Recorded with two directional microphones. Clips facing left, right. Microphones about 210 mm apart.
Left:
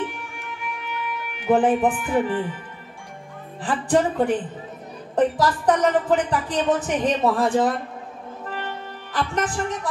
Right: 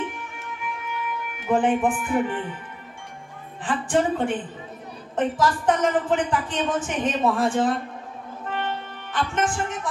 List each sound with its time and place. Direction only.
1.5 s a woman's voice: 35° left (ahead or behind)
3.6 s a woman's voice: 35° left (ahead or behind)
9.1 s a woman's voice: 35° left (ahead or behind)